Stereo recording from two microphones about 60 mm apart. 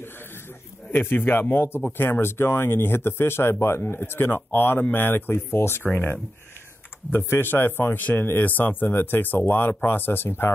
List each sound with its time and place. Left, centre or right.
0.9 s speech: left
7.1 s speech: left